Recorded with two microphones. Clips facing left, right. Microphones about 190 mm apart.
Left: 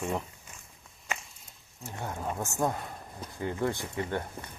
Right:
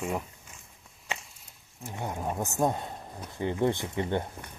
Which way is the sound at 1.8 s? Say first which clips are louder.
Right 2 dB; 15° right (ahead or behind).